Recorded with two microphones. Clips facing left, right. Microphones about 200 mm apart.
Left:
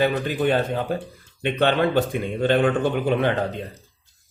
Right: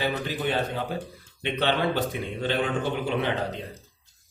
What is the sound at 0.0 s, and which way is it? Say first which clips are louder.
Speech: left 7 dB; 55° left (ahead or behind).